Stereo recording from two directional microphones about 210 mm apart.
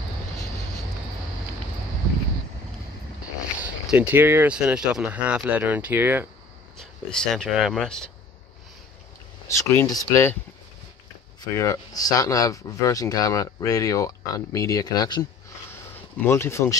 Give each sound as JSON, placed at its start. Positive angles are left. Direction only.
{"t": 3.6, "sound": "speech", "side_deg": -10}
{"t": 6.8, "sound": "speech", "side_deg": 5}
{"t": 9.5, "sound": "speech", "side_deg": 10}
{"t": 11.5, "sound": "speech", "side_deg": 15}
{"t": 16.3, "sound": "speech", "side_deg": 10}